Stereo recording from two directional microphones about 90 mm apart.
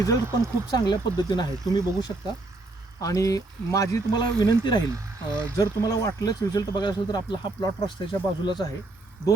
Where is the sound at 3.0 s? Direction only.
40° left (ahead or behind).